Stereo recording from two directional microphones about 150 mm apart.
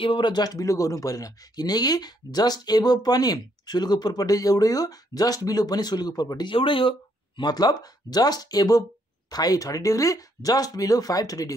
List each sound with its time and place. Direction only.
0.0 s speech: 35° left (ahead or behind)